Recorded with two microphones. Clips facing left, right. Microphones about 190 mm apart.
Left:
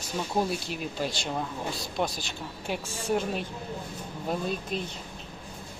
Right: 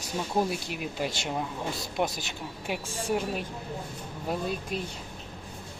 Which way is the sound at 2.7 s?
5° right (ahead or behind).